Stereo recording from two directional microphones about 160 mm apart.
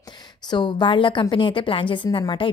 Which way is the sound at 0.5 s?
30° left (ahead or behind).